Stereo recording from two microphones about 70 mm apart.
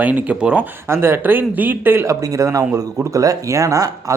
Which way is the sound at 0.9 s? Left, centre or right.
Right.